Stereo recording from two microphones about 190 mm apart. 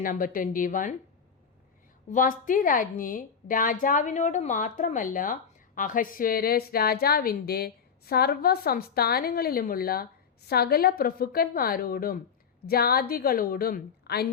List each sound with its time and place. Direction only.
0.0 s a woman's voice: 45° left (ahead or behind)
2.0 s a woman's voice: 45° left (ahead or behind)